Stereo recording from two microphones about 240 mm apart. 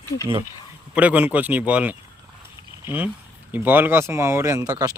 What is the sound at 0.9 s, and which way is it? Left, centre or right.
Speech, centre.